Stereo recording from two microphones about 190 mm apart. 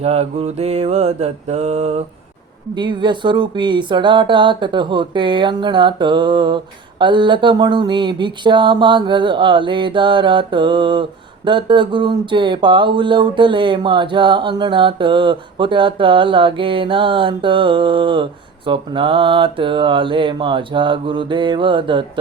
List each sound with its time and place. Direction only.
0.0 s mantra: 30° right (ahead or behind)
2.7 s speech: 25° right (ahead or behind)